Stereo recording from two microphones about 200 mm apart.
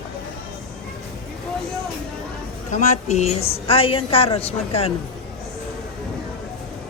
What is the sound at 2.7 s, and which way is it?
A woman's voice, 35° left (ahead or behind).